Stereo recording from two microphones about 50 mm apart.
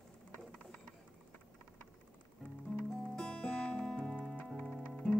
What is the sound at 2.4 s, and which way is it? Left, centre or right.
Music, centre.